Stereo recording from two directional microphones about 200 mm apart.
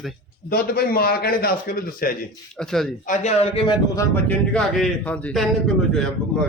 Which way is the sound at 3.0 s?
35° left (ahead or behind).